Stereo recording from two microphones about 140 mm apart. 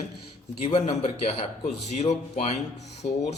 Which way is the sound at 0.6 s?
50° left (ahead or behind).